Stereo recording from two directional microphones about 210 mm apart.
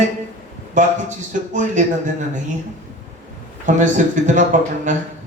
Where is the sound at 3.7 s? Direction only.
35° right (ahead or behind).